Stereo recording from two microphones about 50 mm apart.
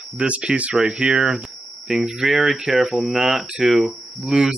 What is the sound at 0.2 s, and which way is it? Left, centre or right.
Speech, centre.